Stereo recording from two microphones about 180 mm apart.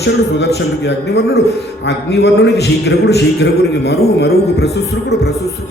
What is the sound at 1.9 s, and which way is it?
A man's voice, 75° left (ahead or behind).